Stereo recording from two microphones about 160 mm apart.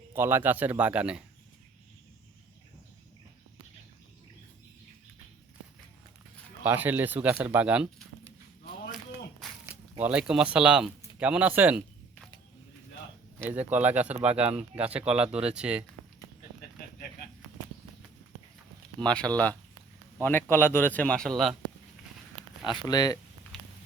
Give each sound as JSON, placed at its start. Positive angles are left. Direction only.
{"t": 0.1, "sound": "speech", "side_deg": -15}
{"t": 6.7, "sound": "speech", "side_deg": -10}
{"t": 8.6, "sound": "a sound", "side_deg": 70}
{"t": 9.4, "sound": "walk", "side_deg": 0}
{"t": 10.0, "sound": "speech", "side_deg": -5}
{"t": 13.4, "sound": "speech", "side_deg": -10}
{"t": 19.0, "sound": "speech", "side_deg": 5}
{"t": 22.9, "sound": "speech", "side_deg": 25}